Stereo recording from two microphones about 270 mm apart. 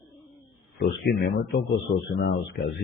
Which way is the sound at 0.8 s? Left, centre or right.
Left.